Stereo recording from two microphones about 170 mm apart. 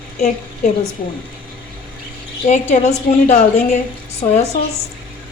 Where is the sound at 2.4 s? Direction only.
40° left (ahead or behind).